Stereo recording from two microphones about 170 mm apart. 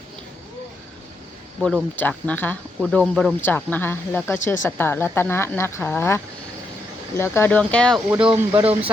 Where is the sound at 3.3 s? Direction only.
10° left (ahead or behind).